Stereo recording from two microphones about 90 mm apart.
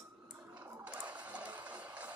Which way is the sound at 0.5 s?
20° right (ahead or behind).